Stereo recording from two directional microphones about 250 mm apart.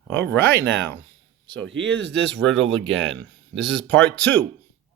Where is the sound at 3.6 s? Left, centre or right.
Centre.